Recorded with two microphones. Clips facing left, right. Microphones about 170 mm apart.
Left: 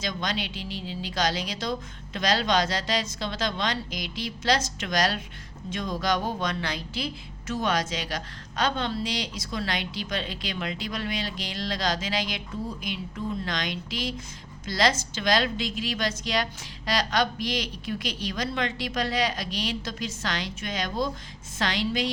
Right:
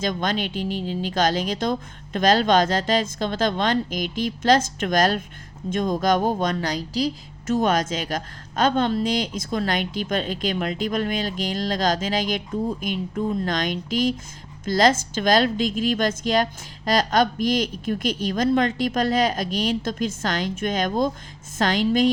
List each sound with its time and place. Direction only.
0.0 s speech: 50° right (ahead or behind)